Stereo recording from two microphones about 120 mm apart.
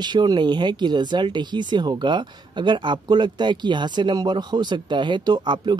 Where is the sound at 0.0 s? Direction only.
35° right (ahead or behind).